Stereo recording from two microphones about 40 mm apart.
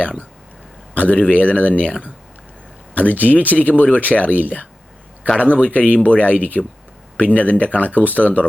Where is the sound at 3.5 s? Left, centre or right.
Left.